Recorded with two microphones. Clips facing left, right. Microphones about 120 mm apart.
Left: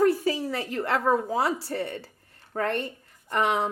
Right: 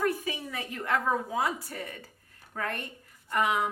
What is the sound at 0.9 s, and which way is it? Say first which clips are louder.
A woman's voice: left 4 dB; 30° left (ahead or behind).